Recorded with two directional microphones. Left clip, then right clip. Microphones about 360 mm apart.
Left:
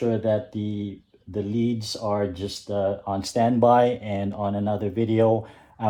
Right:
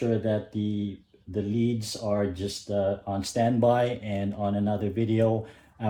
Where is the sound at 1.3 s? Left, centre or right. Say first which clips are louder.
Left 2 dB; centre.